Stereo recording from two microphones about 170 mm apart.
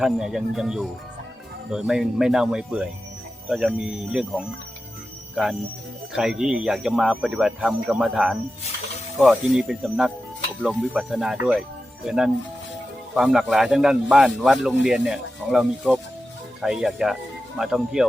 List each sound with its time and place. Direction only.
0.0 s speech: 5° right (ahead or behind)